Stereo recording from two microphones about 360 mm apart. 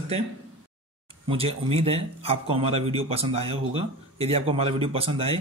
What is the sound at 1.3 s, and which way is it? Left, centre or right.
Speech, centre.